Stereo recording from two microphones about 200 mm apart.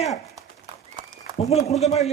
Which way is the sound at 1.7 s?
Centre (ahead or behind).